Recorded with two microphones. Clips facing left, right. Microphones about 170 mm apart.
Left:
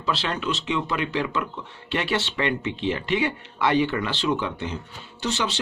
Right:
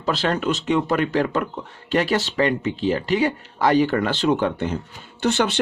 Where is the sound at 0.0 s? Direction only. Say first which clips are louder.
Right 5 dB; 45° right (ahead or behind).